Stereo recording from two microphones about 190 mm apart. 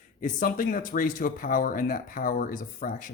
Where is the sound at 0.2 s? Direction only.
45° left (ahead or behind).